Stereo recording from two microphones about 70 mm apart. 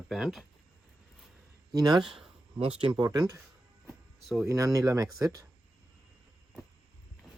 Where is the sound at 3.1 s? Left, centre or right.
Right.